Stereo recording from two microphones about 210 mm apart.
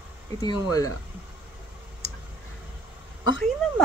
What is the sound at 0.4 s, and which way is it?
Speech, 15° left (ahead or behind).